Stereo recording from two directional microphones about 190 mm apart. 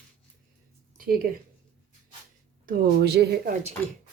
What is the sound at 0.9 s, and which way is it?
Speech, 50° right (ahead or behind).